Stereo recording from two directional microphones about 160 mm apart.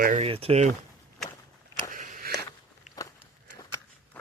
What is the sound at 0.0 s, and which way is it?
Speech, 55° right (ahead or behind).